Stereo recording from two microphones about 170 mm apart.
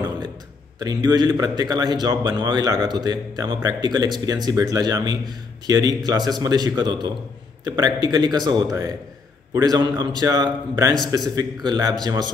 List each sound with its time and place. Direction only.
0.7 s speech: 25° right (ahead or behind)